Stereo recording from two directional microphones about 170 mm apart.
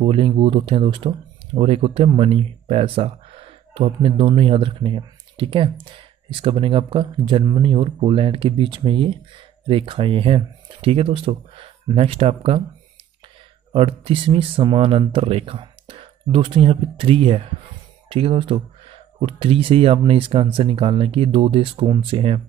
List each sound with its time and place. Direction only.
0.0 s speech: 30° right (ahead or behind)
13.7 s speech: 35° right (ahead or behind)